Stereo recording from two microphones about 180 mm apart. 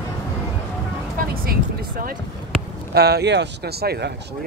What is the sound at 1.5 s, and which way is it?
Speech, 55° right (ahead or behind).